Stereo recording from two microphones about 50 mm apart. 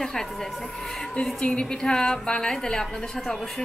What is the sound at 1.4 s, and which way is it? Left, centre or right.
A woman's voice, left.